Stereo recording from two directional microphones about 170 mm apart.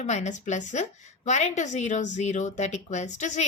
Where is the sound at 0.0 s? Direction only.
45° left (ahead or behind).